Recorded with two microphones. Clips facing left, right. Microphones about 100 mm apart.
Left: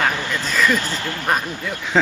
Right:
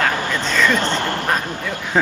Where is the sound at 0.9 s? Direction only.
55° right (ahead or behind).